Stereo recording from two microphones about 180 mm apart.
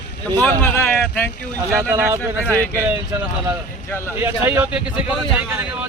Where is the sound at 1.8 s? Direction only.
10° right (ahead or behind).